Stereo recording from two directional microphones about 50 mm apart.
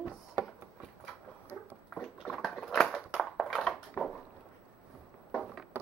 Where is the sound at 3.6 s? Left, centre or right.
Centre.